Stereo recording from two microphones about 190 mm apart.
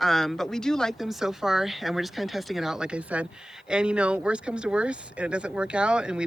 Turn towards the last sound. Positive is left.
turn(degrees=-5)  # may be behind; listen again after turning